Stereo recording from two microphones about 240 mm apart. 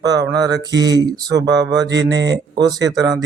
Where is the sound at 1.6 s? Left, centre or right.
Right.